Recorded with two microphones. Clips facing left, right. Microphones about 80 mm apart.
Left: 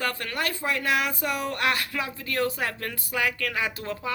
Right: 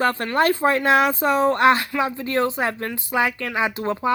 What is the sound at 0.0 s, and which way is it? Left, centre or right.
Speech, right.